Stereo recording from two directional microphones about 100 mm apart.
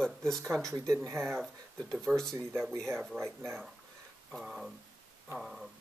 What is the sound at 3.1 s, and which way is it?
Speech, 25° right (ahead or behind).